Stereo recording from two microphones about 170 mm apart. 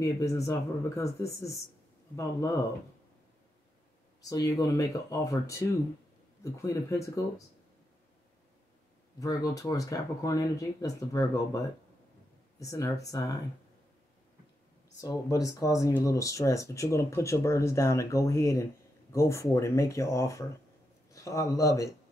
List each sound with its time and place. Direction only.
0.0 s speech: 20° left (ahead or behind)
4.2 s speech: 20° left (ahead or behind)
9.2 s speech: 20° left (ahead or behind)
15.0 s speech: 20° left (ahead or behind)